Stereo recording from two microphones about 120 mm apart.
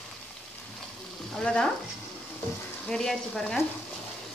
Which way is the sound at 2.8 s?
5° left (ahead or behind).